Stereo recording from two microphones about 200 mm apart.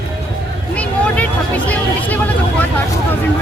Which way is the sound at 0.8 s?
5° left (ahead or behind).